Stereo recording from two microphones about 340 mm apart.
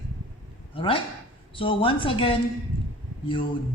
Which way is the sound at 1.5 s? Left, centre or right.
Centre.